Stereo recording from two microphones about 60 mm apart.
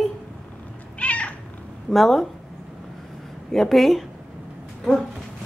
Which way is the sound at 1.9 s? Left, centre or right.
Centre.